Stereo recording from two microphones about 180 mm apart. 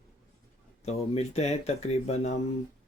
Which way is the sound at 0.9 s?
35° left (ahead or behind).